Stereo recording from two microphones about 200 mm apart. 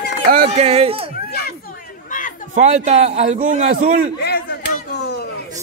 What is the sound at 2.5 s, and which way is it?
A man's voice, 35° right (ahead or behind).